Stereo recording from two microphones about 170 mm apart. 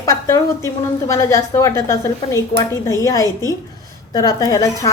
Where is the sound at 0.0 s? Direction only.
20° left (ahead or behind).